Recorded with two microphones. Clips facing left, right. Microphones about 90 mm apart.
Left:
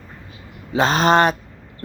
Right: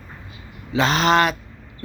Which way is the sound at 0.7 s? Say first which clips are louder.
Left 2 dB; 40° left (ahead or behind).